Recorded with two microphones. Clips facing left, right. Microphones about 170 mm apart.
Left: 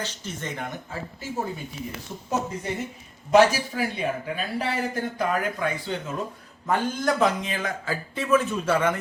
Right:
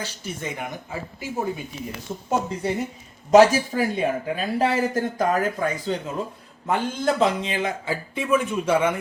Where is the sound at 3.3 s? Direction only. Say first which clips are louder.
Right 4 dB; 40° right (ahead or behind).